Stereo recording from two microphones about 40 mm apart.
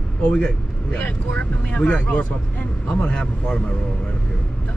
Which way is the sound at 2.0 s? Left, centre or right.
Left.